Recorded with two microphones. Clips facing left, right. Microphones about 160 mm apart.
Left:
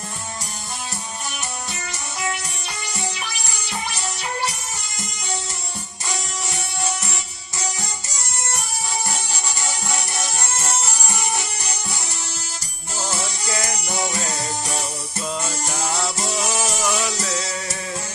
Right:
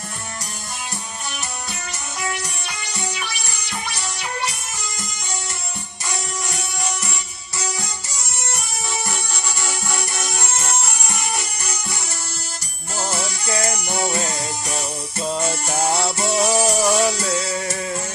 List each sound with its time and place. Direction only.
15.2 s music: 30° right (ahead or behind)